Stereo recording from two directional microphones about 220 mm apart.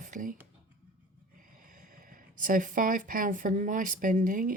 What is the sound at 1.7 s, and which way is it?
Speech, 40° right (ahead or behind).